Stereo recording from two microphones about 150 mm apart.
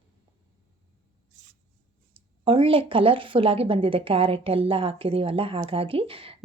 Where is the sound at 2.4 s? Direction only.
40° right (ahead or behind).